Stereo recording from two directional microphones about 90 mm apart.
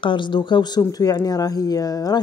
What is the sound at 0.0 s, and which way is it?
Speech, 65° left (ahead or behind).